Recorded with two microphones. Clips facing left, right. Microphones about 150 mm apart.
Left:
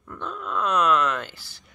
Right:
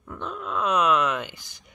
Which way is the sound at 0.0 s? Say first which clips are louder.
Even; 10° right (ahead or behind).